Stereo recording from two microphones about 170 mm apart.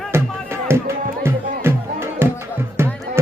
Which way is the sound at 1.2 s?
15° right (ahead or behind).